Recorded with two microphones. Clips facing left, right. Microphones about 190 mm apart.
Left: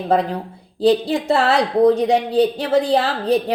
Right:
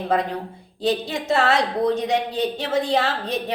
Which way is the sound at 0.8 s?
35° left (ahead or behind).